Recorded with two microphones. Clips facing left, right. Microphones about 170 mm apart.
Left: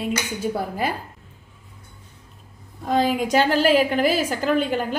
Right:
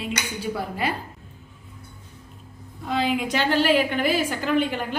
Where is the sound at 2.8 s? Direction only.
40° left (ahead or behind).